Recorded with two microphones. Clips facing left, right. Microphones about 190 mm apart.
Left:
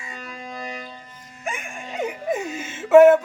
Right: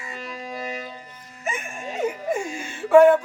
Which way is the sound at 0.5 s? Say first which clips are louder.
Right 2 dB; 5° right (ahead or behind).